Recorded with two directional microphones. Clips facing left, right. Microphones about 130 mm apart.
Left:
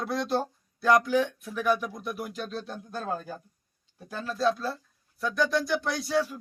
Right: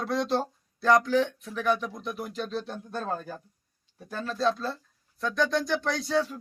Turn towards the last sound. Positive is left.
turn(degrees=5)  # may be behind; listen again after turning